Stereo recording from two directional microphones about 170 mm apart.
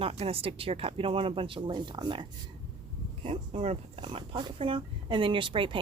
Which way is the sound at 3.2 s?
35° right (ahead or behind).